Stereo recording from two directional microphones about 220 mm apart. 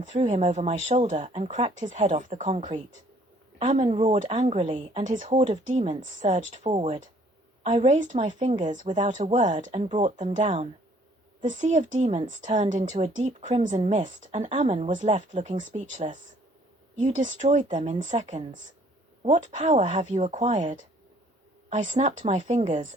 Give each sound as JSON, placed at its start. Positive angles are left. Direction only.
{"t": 0.1, "sound": "speech", "side_deg": -30}
{"t": 6.7, "sound": "speech", "side_deg": -20}